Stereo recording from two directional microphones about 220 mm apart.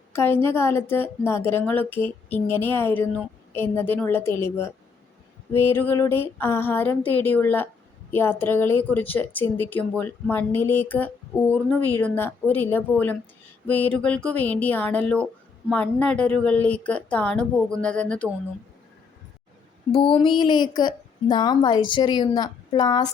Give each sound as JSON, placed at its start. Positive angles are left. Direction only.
{"t": 0.1, "sound": "a woman's voice", "side_deg": 10}
{"t": 19.9, "sound": "a woman's voice", "side_deg": 25}